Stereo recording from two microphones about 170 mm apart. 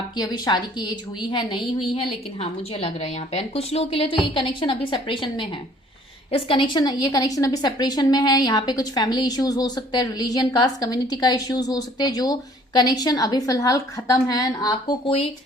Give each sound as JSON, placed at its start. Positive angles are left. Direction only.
{"t": 0.2, "sound": "a woman's voice", "side_deg": 25}